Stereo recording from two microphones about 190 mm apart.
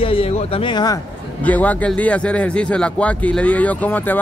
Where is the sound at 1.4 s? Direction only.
10° left (ahead or behind).